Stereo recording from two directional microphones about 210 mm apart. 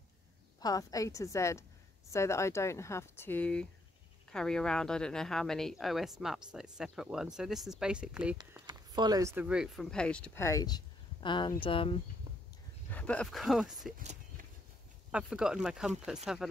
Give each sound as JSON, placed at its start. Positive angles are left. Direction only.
{"t": 0.6, "sound": "speech", "side_deg": 15}
{"t": 8.6, "sound": "speech", "side_deg": -20}
{"t": 12.9, "sound": "speech", "side_deg": 5}
{"t": 13.9, "sound": "a sound", "side_deg": -40}
{"t": 15.0, "sound": "speech", "side_deg": -5}